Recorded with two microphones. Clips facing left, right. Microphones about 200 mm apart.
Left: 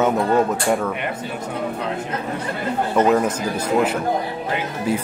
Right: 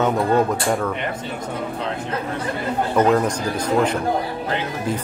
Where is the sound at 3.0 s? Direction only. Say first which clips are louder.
Left 1 dB; 5° left (ahead or behind).